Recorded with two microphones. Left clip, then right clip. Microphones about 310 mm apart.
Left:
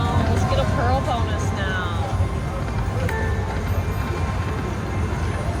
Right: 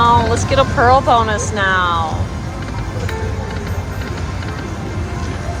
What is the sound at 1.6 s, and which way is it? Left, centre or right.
Speech, right.